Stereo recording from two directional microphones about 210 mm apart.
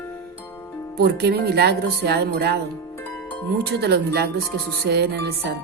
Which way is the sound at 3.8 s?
50° right (ahead or behind).